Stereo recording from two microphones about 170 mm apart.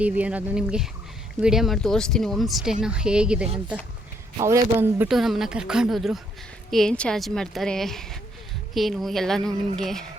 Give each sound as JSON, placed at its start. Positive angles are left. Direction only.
{"t": 0.0, "sound": "speech", "side_deg": -10}
{"t": 4.4, "sound": "speech", "side_deg": -20}
{"t": 5.0, "sound": "speech", "side_deg": 0}